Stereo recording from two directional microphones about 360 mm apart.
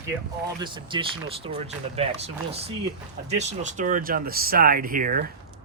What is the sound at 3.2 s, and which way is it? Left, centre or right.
Speech, centre.